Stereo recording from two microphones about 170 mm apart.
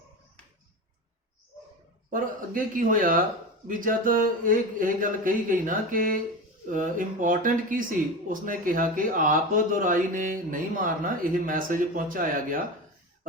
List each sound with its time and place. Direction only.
2.0 s speech: 55° right (ahead or behind)